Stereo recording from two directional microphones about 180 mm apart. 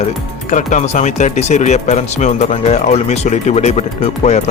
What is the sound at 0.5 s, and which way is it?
Speech, 40° left (ahead or behind).